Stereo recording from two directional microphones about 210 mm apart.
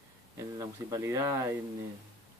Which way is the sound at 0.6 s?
15° right (ahead or behind).